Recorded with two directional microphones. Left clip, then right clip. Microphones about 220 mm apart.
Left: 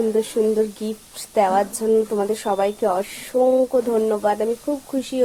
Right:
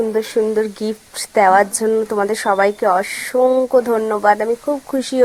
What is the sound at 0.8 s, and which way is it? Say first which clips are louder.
Speech: right 6 dB; 20° right (ahead or behind).